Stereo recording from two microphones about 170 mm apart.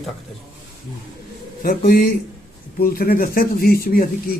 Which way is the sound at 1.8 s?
60° left (ahead or behind).